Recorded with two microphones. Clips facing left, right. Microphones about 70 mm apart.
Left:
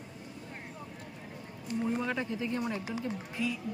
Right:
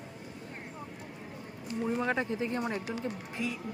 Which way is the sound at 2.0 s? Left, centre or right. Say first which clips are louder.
Right 3 dB; right.